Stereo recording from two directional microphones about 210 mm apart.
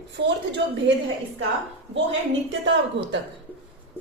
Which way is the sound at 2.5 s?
60° right (ahead or behind).